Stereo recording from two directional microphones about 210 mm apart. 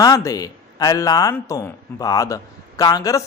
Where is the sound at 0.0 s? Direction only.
15° left (ahead or behind).